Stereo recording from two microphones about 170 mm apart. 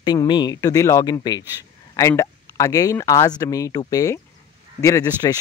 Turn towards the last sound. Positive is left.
turn(degrees=20)  # may be behind; listen again after turning